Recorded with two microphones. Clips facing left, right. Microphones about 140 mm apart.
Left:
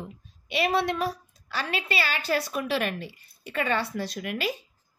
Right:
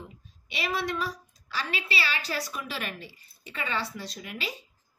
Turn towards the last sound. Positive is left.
turn(degrees=60)  # may be behind; listen again after turning